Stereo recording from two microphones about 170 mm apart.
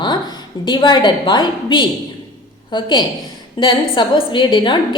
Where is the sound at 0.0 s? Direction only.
25° left (ahead or behind).